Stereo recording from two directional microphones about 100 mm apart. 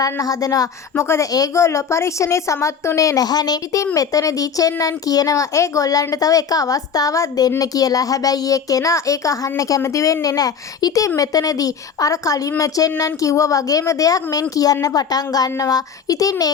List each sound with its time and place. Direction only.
0.0 s a child's voice: 35° left (ahead or behind)
1.0 s a child's voice: 25° left (ahead or behind)